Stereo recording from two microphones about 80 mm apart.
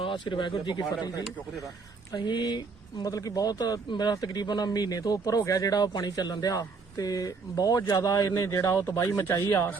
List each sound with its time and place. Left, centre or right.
0.0 s speech: left
2.1 s speech: left